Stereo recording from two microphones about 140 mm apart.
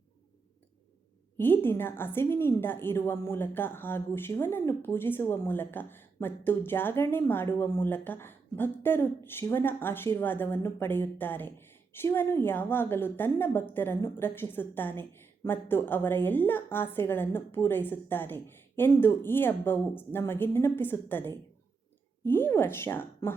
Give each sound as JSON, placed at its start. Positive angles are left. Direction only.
{"t": 1.4, "sound": "a woman's voice", "side_deg": 15}